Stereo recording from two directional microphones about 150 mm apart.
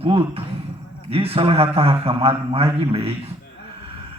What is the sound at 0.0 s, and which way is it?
A man's voice, 40° right (ahead or behind).